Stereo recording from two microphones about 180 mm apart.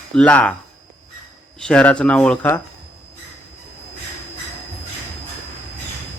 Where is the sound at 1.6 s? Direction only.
5° left (ahead or behind).